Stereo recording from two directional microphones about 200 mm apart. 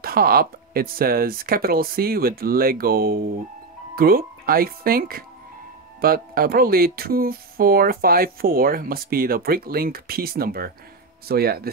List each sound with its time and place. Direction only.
0.0 s speech: 50° right (ahead or behind)